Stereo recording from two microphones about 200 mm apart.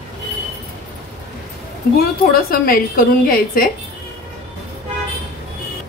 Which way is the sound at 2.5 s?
45° left (ahead or behind).